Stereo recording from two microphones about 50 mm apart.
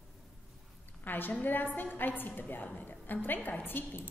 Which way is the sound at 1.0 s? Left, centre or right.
Left.